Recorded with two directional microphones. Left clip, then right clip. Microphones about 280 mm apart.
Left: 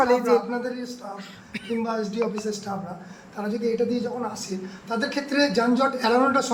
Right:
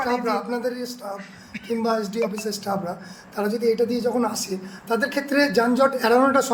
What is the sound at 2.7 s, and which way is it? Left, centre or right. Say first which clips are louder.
A man's voice: right 6 dB; right.